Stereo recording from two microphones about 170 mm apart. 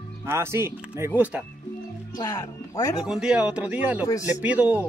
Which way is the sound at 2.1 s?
20° left (ahead or behind).